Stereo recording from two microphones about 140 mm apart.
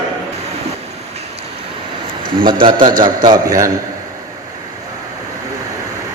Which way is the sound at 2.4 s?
35° right (ahead or behind).